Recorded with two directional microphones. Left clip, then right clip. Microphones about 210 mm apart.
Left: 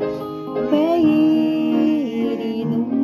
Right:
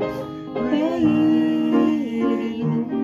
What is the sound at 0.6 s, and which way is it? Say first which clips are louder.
Music: left 4 dB; 50° left (ahead or behind).